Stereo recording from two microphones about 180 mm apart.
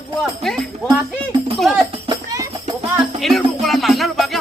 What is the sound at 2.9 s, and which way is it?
Music, centre (ahead or behind).